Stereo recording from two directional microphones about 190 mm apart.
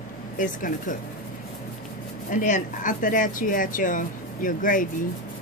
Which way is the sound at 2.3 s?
45° left (ahead or behind).